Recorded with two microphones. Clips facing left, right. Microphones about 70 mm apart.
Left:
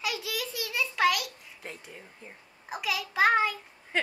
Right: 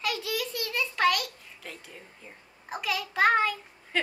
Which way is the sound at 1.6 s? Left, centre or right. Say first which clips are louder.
Left 1 dB; left.